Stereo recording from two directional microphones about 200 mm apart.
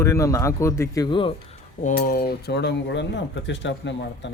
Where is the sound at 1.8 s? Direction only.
35° left (ahead or behind); by 3.9 s 65° left (ahead or behind).